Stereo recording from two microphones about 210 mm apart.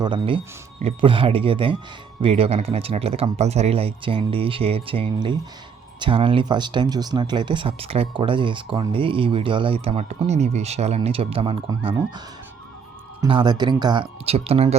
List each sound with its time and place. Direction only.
0.0 s speech: 25° right (ahead or behind)
13.2 s speech: 20° right (ahead or behind)